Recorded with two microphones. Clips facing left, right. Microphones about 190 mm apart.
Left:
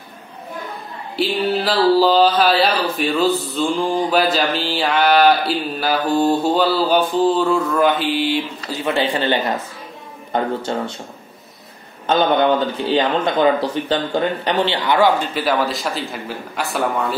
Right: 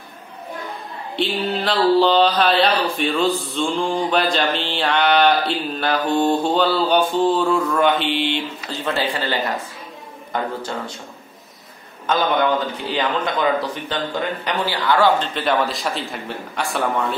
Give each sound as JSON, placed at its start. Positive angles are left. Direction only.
{"t": 1.1, "sound": "mantra", "side_deg": 5}
{"t": 8.8, "sound": "speech", "side_deg": 20}
{"t": 12.1, "sound": "speech", "side_deg": 25}
{"t": 15.1, "sound": "mantra", "side_deg": 10}